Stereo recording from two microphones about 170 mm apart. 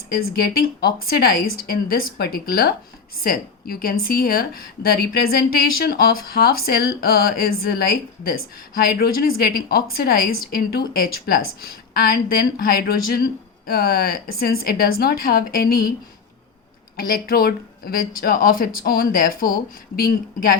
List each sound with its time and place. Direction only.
0.2 s a woman's voice: 65° left (ahead or behind)
17.0 s a woman's voice: 60° left (ahead or behind)